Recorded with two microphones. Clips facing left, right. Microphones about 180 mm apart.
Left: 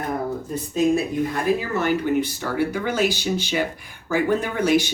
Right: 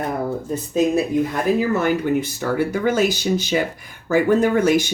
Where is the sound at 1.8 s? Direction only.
45° right (ahead or behind).